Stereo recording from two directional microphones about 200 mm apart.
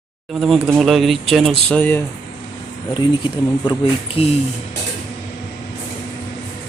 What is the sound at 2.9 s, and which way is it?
Speech, 20° left (ahead or behind).